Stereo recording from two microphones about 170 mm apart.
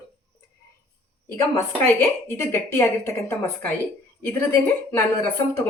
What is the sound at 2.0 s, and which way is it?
Speech, 15° left (ahead or behind).